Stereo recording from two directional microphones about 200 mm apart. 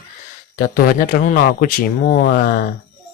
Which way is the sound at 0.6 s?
45° left (ahead or behind).